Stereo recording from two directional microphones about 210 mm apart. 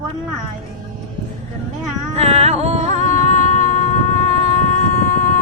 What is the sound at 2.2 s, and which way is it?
Music, 30° right (ahead or behind).